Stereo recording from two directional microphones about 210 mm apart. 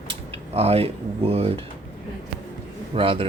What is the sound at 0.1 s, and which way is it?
Speech, 30° right (ahead or behind).